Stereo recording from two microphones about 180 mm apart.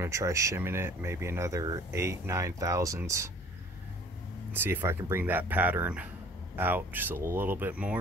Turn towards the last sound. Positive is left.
turn(degrees=-5)  # may be behind; listen again after turning